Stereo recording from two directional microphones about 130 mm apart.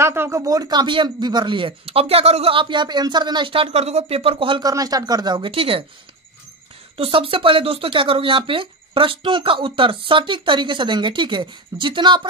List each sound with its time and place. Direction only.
0.0 s speech: 20° right (ahead or behind); by 5.9 s 45° right (ahead or behind)
7.0 s speech: 45° right (ahead or behind)